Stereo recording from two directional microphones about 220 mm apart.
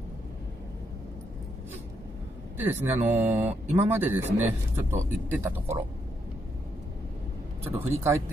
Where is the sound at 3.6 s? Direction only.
30° right (ahead or behind).